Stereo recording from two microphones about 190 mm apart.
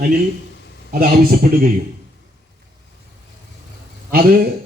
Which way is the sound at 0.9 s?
50° right (ahead or behind).